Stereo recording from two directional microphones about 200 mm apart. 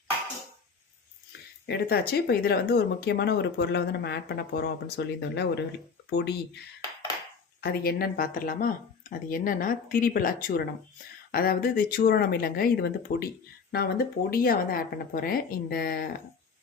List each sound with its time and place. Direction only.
1.6 s speech: 55° left (ahead or behind)
7.6 s speech: 50° left (ahead or behind)